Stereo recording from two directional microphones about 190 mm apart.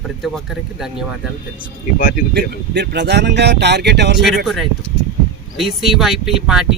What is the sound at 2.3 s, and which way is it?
Speech, 60° right (ahead or behind).